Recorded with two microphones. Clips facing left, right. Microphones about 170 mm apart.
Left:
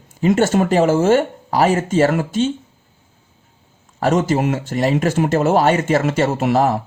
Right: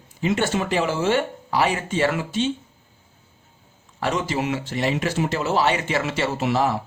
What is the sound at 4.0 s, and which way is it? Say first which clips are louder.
A man's voice: left 8 dB; 45° left (ahead or behind).